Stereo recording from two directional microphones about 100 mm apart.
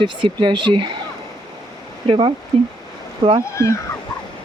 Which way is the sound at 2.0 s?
60° right (ahead or behind).